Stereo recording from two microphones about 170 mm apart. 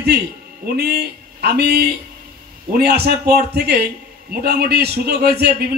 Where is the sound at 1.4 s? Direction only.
70° right (ahead or behind).